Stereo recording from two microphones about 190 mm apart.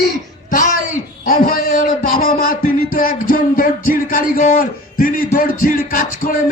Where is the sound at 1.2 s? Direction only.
50° left (ahead or behind).